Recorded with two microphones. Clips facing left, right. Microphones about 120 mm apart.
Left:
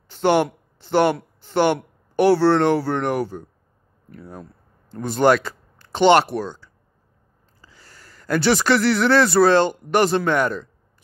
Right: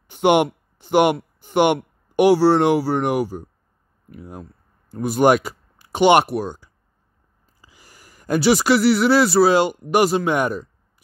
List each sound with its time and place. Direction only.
0.1 s speech: 15° right (ahead or behind)
0.7 s a sound: 15° right (ahead or behind)
1.4 s speech: 15° right (ahead or behind)